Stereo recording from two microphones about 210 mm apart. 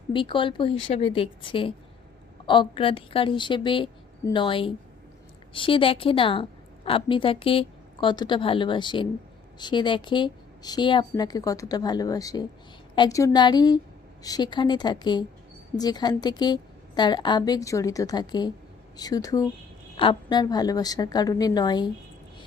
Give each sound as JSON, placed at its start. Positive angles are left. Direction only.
{"t": 0.1, "sound": "a woman's voice", "side_deg": 25}